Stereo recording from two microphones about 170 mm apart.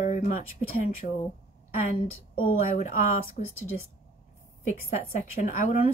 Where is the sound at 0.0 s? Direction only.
45° left (ahead or behind).